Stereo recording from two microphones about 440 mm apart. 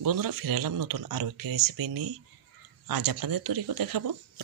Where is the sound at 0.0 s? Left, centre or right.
Right.